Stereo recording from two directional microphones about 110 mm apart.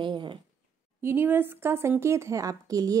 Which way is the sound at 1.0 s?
20° right (ahead or behind).